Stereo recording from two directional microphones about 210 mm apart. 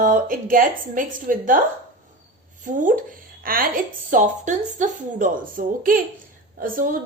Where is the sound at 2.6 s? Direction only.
40° right (ahead or behind).